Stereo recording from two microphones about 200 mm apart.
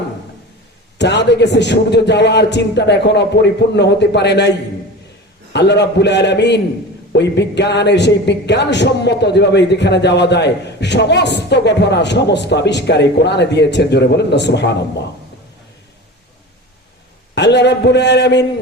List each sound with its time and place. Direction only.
0.9 s a woman's voice: 60° left (ahead or behind)
5.5 s a woman's voice: 60° left (ahead or behind)
17.3 s a woman's voice: 60° left (ahead or behind)